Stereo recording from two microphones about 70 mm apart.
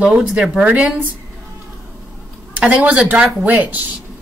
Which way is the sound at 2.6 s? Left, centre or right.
Right.